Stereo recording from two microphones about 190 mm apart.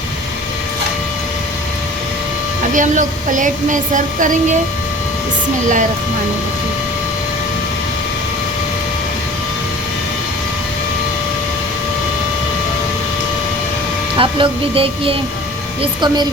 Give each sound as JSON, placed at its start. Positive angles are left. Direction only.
{"t": 2.7, "sound": "a woman's voice", "side_deg": -40}
{"t": 14.2, "sound": "speech", "side_deg": -25}